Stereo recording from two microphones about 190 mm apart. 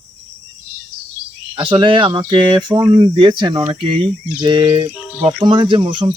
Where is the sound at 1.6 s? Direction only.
25° right (ahead or behind).